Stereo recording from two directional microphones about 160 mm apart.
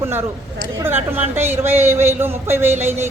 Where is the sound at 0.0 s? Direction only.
15° right (ahead or behind).